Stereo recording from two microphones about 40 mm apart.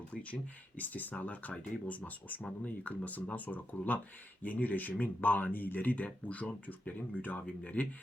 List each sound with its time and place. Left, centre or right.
0.8 s speech: left
7.4 s speech: left